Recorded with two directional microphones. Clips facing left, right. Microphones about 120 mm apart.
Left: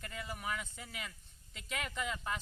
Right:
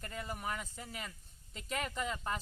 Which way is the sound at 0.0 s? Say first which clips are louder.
Right 2 dB; 40° right (ahead or behind).